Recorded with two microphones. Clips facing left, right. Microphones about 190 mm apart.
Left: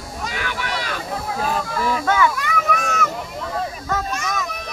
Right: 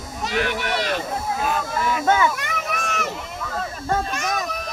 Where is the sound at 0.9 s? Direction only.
20° right (ahead or behind).